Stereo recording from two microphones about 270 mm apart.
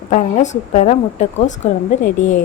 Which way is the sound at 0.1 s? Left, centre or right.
Left.